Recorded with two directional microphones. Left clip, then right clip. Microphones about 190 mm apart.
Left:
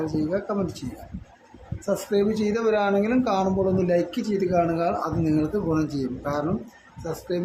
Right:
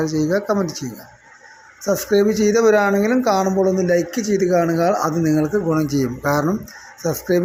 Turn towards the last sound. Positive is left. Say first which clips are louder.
# right 10 dB
turn(degrees=-30)  # may be behind; listen again after turning